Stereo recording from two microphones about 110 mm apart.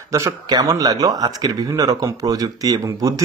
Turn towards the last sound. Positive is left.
turn(degrees=-35)  # may be behind; listen again after turning